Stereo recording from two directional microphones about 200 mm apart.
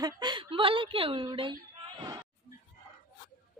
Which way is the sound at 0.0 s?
20° right (ahead or behind).